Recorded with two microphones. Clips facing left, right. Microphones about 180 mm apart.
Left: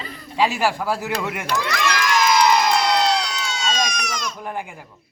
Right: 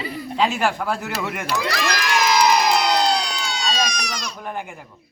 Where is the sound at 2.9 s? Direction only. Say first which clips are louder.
Even; 35° right (ahead or behind).